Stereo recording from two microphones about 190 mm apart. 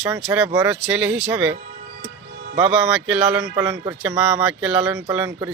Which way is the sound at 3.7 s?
5° right (ahead or behind).